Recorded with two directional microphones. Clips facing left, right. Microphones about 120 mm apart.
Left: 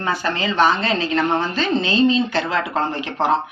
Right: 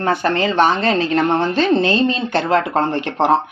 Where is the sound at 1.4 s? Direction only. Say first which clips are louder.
Right 5 dB; 55° right (ahead or behind).